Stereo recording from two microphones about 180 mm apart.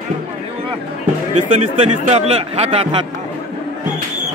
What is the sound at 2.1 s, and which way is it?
Speech, 35° right (ahead or behind).